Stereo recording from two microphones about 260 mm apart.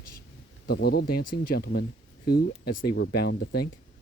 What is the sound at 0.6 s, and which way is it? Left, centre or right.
Speech, left.